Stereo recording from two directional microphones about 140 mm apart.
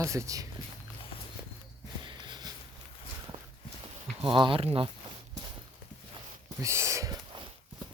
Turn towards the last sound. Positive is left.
turn(degrees=-20)  # may be behind; listen again after turning